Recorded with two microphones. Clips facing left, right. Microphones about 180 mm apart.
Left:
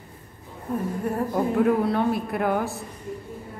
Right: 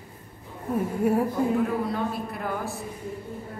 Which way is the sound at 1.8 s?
65° left (ahead or behind).